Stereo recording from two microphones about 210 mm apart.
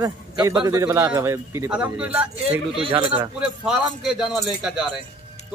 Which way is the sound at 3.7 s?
Centre (ahead or behind).